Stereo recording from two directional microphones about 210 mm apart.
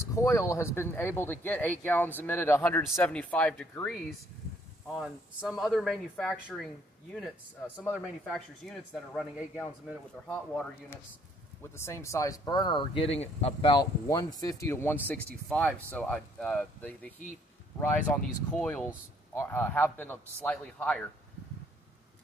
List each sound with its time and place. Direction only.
0.0 s speech: 15° left (ahead or behind)
8.2 s speech: centre (ahead or behind)
11.6 s speech: 10° left (ahead or behind)